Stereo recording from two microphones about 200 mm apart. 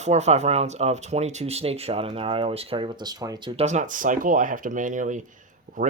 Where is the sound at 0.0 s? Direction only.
35° right (ahead or behind).